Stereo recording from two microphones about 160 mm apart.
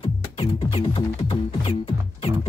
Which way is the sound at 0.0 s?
40° left (ahead or behind).